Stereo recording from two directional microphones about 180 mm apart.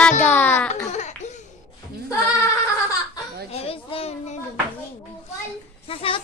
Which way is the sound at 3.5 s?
30° left (ahead or behind).